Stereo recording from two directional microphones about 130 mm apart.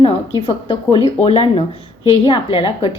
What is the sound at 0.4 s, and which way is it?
A woman's voice, 45° left (ahead or behind).